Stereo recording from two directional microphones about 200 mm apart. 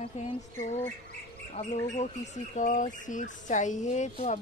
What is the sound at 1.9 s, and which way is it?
Speech, 35° left (ahead or behind).